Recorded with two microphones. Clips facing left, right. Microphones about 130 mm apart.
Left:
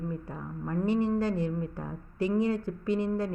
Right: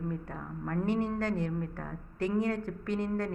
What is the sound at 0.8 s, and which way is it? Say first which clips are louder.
Speech: left 3 dB; 55° right (ahead or behind).